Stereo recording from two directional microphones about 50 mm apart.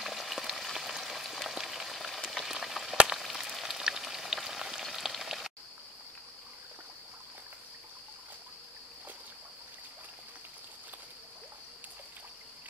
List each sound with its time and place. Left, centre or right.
0.0 s frying: centre
4.4 s a sound: centre
4.9 s raindrop: centre